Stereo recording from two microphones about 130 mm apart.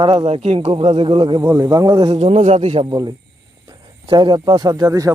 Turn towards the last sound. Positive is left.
turn(degrees=-25)  # may be behind; listen again after turning